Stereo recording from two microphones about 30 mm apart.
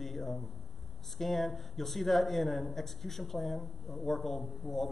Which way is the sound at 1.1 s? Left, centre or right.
Centre.